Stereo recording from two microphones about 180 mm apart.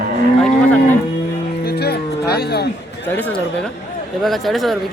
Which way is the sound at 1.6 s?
60° left (ahead or behind).